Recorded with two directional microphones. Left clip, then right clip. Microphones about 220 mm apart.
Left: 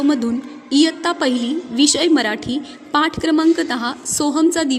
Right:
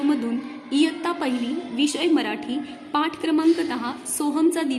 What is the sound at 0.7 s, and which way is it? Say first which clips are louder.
A woman's voice: left 6 dB; 20° left (ahead or behind).